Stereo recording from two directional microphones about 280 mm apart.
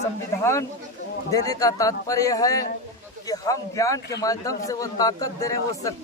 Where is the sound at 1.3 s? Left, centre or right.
Centre.